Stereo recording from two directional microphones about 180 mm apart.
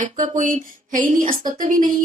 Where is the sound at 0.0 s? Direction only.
45° right (ahead or behind).